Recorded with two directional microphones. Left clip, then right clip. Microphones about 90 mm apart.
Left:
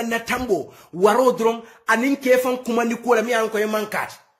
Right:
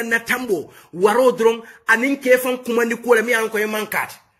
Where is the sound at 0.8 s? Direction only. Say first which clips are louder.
Right 2 dB; 40° left (ahead or behind).